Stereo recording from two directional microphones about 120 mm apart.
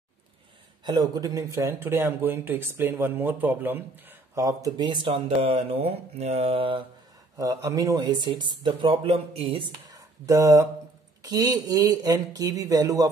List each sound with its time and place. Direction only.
0.8 s speech: 35° right (ahead or behind); by 4.5 s 15° right (ahead or behind)
4.5 s speech: 30° right (ahead or behind); by 6.8 s 50° right (ahead or behind)
7.3 s speech: 30° right (ahead or behind)
9.0 s speech: 55° right (ahead or behind)
10.2 s speech: 25° right (ahead or behind)